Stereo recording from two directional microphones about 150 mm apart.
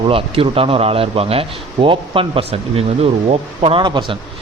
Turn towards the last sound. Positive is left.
turn(degrees=-35)  # may be behind; listen again after turning